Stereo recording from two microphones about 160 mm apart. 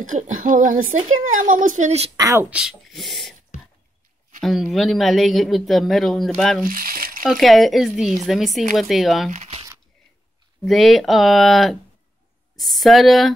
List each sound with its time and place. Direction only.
0.0 s speech: 55° right (ahead or behind)
2.1 s speech: 20° right (ahead or behind)
2.5 s speech: 5° right (ahead or behind)
4.4 s speech: centre (ahead or behind)
6.6 s a sound: 65° right (ahead or behind)
7.2 s speech: centre (ahead or behind)
9.3 s crumpling: 45° right (ahead or behind)
10.7 s speech: centre (ahead or behind)